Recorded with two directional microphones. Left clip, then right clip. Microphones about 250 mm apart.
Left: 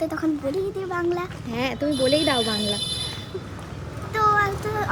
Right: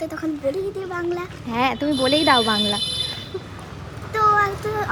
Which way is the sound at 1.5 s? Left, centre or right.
Centre.